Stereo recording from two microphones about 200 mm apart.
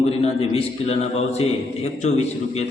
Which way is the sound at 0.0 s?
30° left (ahead or behind).